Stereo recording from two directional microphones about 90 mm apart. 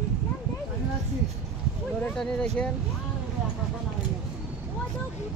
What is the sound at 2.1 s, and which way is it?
Speech, 5° left (ahead or behind).